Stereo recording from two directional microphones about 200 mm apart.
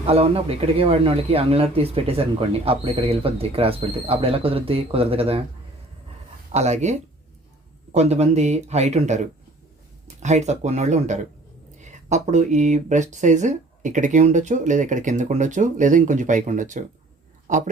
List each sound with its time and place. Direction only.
0.0 s speech: 30° right (ahead or behind)
6.5 s speech: 35° right (ahead or behind)
7.9 s speech: 35° right (ahead or behind)